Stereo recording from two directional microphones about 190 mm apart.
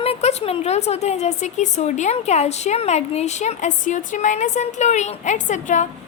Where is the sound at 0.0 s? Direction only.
35° left (ahead or behind).